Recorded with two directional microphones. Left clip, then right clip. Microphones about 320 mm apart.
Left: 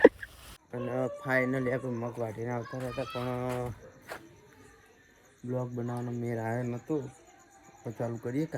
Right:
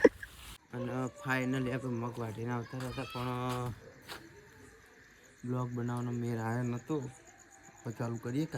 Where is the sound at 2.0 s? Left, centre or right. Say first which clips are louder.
Left 5 dB; centre.